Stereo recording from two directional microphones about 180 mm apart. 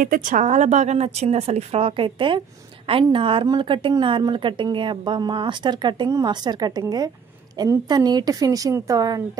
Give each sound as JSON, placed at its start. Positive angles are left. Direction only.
{"t": 0.0, "sound": "a woman's voice", "side_deg": -50}